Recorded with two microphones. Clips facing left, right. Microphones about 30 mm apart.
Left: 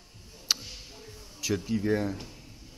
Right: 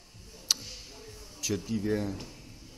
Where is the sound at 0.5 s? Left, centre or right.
Centre.